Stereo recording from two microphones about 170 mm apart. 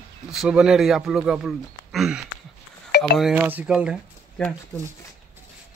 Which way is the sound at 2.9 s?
70° left (ahead or behind).